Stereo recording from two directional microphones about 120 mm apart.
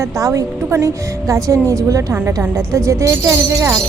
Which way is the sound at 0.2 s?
25° right (ahead or behind).